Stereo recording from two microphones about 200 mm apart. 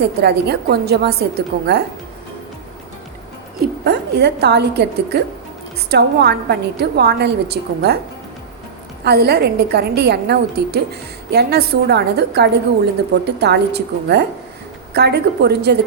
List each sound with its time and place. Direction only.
0.0 s a woman's voice: 55° right (ahead or behind)
3.6 s a woman's voice: 55° right (ahead or behind)
9.0 s a woman's voice: 55° right (ahead or behind)